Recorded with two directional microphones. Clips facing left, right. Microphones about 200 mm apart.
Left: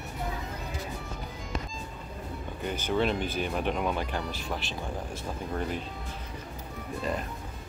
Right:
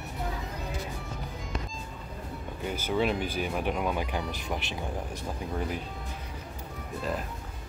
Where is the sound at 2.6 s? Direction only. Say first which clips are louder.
Even; 5° right (ahead or behind).